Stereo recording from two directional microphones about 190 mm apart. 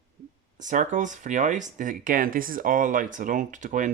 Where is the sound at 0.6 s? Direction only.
40° right (ahead or behind).